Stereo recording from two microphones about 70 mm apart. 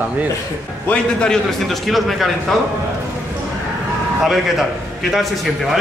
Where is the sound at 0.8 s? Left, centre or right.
Centre.